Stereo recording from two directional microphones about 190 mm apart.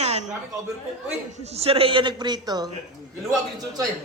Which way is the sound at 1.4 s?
35° right (ahead or behind).